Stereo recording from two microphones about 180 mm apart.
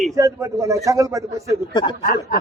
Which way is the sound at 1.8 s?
50° left (ahead or behind).